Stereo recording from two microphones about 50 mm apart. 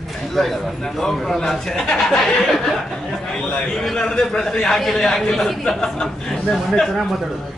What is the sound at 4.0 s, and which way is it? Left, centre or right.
A man's voice, centre.